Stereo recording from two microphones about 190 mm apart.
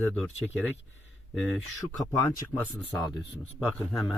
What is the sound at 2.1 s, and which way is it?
Speech, 15° left (ahead or behind).